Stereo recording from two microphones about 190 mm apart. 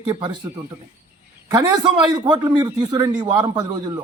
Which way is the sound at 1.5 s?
20° right (ahead or behind).